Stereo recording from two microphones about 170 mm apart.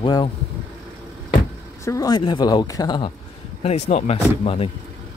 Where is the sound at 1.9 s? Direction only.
20° left (ahead or behind).